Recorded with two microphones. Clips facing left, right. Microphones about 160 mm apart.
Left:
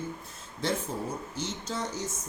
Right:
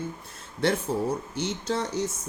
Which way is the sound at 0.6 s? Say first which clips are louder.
Right 6 dB; 65° right (ahead or behind).